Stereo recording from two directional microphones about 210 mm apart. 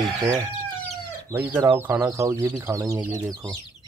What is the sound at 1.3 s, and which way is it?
Speech, 15° right (ahead or behind).